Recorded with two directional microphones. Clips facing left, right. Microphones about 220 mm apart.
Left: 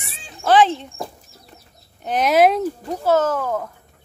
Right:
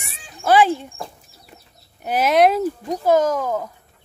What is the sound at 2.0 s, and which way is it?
Speech, 5° right (ahead or behind).